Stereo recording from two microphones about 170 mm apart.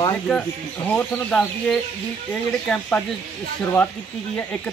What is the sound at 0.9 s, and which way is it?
Speech, 10° left (ahead or behind).